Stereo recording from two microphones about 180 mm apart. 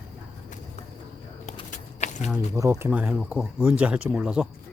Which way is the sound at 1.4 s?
40° left (ahead or behind).